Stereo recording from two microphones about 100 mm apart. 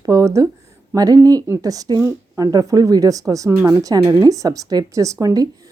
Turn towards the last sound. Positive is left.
turn(degrees=-35)  # may be behind; listen again after turning